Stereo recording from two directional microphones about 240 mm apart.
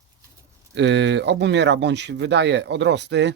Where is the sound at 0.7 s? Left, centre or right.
Right.